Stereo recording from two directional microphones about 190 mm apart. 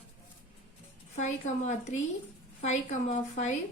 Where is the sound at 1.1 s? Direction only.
35° left (ahead or behind).